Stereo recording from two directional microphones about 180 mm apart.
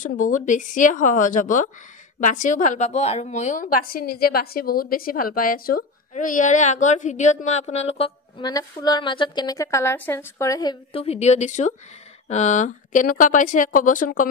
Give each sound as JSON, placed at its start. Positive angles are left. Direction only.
{"t": 0.0, "sound": "a woman's voice", "side_deg": 45}
{"t": 8.4, "sound": "a woman's voice", "side_deg": 20}